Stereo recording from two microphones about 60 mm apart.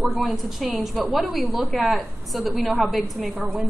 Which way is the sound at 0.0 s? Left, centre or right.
Centre.